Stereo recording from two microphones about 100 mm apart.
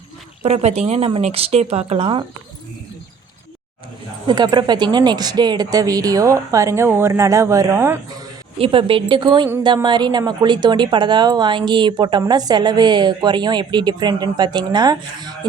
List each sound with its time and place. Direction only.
0.4 s speech: 90° right
4.3 s speech: 45° right (ahead or behind); by 7.9 s 30° right (ahead or behind)
8.5 s a woman's voice: 65° right (ahead or behind); by 15.4 s 45° right (ahead or behind)